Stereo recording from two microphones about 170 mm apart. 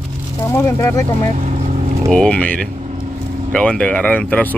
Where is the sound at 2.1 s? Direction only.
5° left (ahead or behind).